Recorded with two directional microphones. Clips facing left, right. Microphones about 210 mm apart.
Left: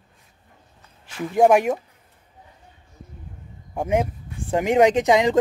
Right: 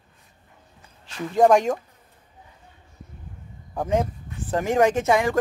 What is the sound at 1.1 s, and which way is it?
Speech, 10° left (ahead or behind).